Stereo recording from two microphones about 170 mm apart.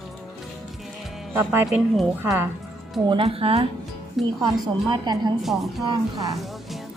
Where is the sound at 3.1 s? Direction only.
30° right (ahead or behind).